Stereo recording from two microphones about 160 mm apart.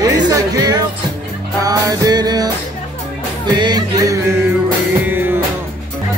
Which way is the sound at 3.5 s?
25° right (ahead or behind).